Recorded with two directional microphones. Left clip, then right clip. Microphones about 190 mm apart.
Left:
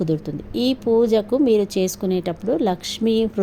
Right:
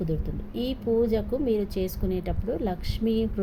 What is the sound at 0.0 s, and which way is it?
A woman's voice, 40° left (ahead or behind).